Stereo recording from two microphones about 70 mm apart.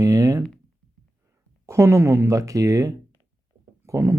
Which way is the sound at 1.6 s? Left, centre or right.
Right.